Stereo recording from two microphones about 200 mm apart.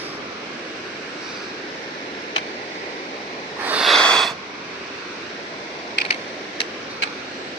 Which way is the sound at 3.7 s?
Centre (ahead or behind).